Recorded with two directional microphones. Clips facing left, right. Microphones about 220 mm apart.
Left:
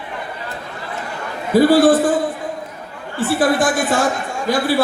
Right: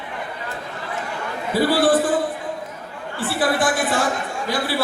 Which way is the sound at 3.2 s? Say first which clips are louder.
Left 5 dB; 45° left (ahead or behind).